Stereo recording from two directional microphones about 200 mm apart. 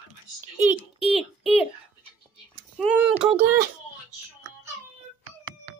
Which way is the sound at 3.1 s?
30° right (ahead or behind).